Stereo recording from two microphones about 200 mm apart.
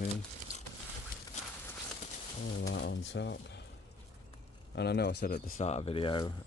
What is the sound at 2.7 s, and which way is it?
Speech, 60° left (ahead or behind).